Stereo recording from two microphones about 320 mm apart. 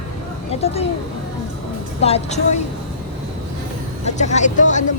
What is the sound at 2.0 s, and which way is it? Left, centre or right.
Speech, centre.